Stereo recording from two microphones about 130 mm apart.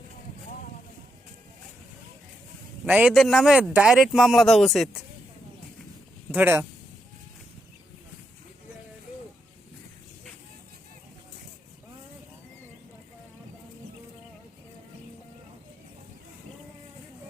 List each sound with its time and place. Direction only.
2.8 s a man's voice: 10° right (ahead or behind)
6.3 s a man's voice: 15° right (ahead or behind)